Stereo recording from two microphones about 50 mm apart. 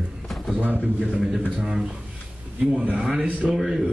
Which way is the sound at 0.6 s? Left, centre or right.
Right.